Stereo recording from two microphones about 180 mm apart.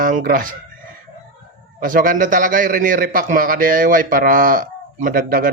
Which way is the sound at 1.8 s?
50° right (ahead or behind).